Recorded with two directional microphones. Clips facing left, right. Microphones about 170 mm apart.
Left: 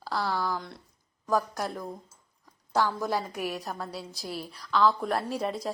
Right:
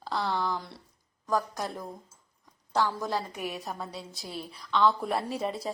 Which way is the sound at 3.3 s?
Centre (ahead or behind).